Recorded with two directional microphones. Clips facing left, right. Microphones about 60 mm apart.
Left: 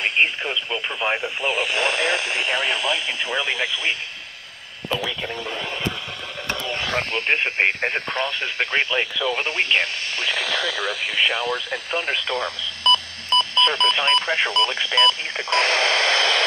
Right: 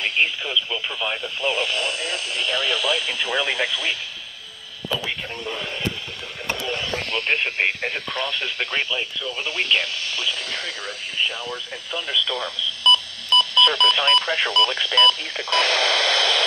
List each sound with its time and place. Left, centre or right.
0.0 s speech: left
1.2 s speech: centre
1.8 s speech: left
2.9 s speech: centre
7.1 s speech: left
10.2 s speech: left